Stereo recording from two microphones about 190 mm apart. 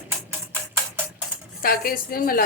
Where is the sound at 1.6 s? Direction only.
50° left (ahead or behind).